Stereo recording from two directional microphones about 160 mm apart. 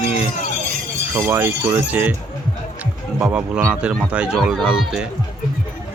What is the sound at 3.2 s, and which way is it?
Speech, 5° right (ahead or behind).